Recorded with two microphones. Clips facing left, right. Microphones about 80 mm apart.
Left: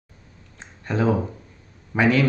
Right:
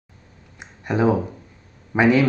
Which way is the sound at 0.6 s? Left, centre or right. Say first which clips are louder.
Right 3 dB; centre.